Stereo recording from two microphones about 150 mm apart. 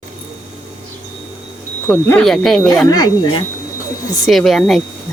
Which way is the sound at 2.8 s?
25° left (ahead or behind).